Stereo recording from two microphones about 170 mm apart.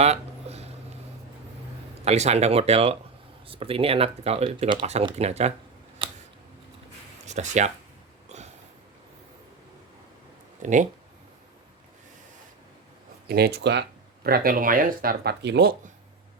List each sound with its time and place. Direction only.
0.0 s a sound: 40° right (ahead or behind)
2.0 s speech: 40° right (ahead or behind)
6.0 s scissors: 35° right (ahead or behind)
7.3 s speech: 45° right (ahead or behind)
8.3 s a sound: 40° right (ahead or behind)
10.6 s speech: 45° right (ahead or behind)
13.2 s speech: 70° right (ahead or behind); by 13.8 s 90° right
14.3 s speech: 60° right (ahead or behind); by 15.7 s 80° right